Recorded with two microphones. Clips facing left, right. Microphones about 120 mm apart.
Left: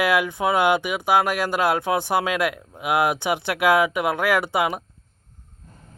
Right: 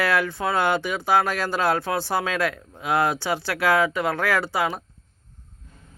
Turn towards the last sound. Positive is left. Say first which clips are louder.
# left 2 dB
turn(degrees=20)  # may be behind; listen again after turning